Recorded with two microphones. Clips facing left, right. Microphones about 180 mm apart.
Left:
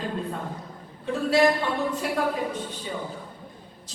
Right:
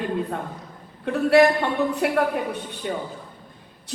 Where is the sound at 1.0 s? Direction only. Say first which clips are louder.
Right 4 dB; 65° right (ahead or behind).